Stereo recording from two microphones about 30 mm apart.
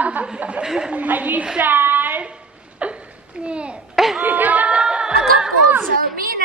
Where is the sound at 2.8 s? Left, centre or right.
Right.